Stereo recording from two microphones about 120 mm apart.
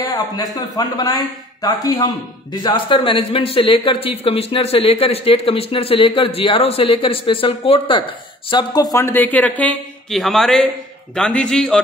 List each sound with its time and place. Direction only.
0.0 s a man's voice: 30° left (ahead or behind)
8.9 s a man's voice: 20° left (ahead or behind)
10.1 s a man's voice: centre (ahead or behind)